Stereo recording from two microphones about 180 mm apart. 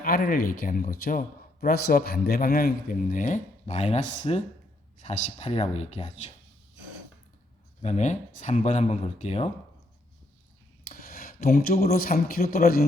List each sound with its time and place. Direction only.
0.0 s a man's voice: 55° left (ahead or behind)
7.8 s speech: 40° left (ahead or behind)
10.8 s a sound: 55° left (ahead or behind)
11.8 s a man's voice: 55° left (ahead or behind)